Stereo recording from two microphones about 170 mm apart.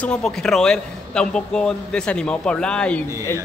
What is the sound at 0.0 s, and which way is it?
Speech, 5° left (ahead or behind).